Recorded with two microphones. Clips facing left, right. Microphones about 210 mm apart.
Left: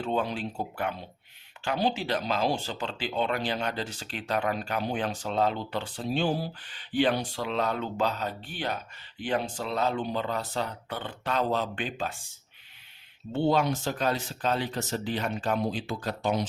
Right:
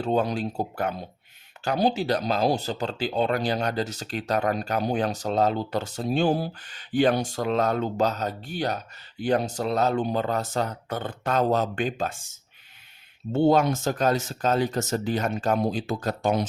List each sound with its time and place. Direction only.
0.0 s speech: 40° right (ahead or behind)
13.3 s speech: 45° right (ahead or behind)